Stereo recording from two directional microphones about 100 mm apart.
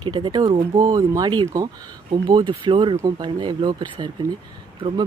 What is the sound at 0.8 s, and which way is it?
Speech, 40° right (ahead or behind).